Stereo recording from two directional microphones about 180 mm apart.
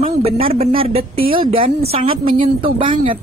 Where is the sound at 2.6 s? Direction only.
30° right (ahead or behind).